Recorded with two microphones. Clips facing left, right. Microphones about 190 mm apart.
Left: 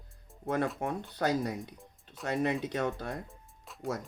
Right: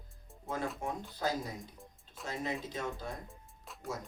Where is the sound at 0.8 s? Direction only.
60° left (ahead or behind).